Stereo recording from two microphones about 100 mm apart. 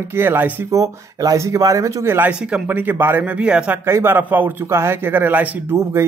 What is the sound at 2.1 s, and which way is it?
Speech, 15° right (ahead or behind).